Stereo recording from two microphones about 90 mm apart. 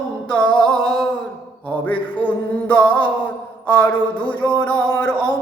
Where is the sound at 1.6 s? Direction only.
20° left (ahead or behind).